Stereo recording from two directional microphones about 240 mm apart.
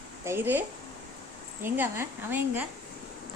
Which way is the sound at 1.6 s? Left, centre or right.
Centre.